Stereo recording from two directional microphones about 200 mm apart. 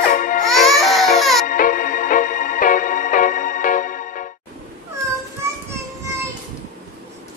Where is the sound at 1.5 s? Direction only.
45° left (ahead or behind).